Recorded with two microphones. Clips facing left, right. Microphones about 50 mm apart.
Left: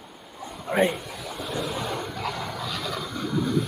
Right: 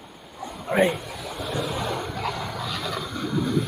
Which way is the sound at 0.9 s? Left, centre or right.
Centre.